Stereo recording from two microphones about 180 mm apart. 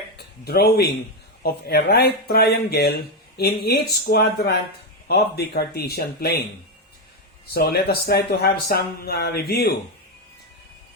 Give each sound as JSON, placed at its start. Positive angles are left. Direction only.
{"t": 0.2, "sound": "speech", "side_deg": 60}
{"t": 7.5, "sound": "speech", "side_deg": 60}